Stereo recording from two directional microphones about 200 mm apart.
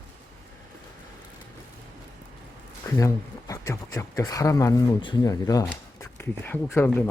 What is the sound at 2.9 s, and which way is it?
Speech, 15° left (ahead or behind).